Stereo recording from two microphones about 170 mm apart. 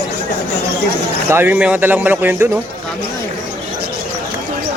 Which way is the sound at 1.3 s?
10° right (ahead or behind).